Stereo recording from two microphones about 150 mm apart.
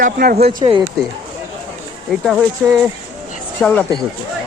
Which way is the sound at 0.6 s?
35° right (ahead or behind).